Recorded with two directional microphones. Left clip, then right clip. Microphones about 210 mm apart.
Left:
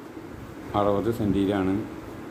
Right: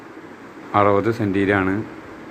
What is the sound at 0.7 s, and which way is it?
Speech, 15° right (ahead or behind).